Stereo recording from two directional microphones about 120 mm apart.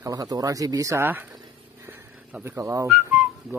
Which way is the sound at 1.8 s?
20° right (ahead or behind).